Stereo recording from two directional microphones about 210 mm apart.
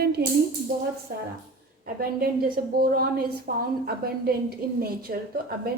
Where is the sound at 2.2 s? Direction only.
45° right (ahead or behind).